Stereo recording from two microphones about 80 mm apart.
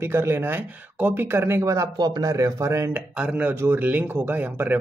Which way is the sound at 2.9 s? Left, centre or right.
Centre.